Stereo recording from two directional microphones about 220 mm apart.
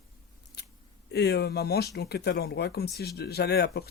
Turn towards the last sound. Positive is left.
turn(degrees=45)  # may be behind; listen again after turning